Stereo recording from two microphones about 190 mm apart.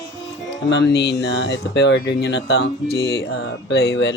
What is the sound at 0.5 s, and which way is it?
Speech, 70° left (ahead or behind).